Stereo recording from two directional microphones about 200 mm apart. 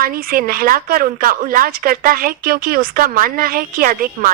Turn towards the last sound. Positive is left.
turn(degrees=-45)  # may be behind; listen again after turning